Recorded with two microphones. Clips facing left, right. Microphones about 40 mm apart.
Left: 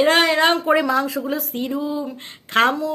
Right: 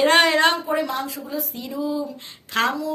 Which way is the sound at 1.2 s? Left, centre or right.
Left.